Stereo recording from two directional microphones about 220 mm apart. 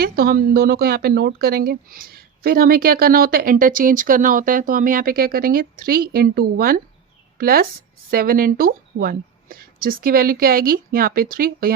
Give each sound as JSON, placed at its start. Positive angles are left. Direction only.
{"t": 0.0, "sound": "speech", "side_deg": -40}